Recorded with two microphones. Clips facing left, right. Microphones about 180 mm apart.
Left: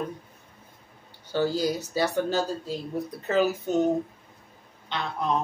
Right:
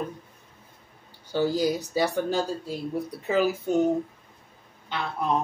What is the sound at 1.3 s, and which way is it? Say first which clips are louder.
Speech: right 1 dB; 15° right (ahead or behind).